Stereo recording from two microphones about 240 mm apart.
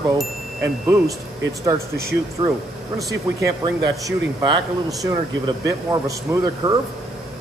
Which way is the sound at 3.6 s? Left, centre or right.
Centre.